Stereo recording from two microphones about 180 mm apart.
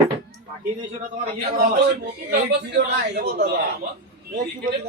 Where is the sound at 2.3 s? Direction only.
65° right (ahead or behind).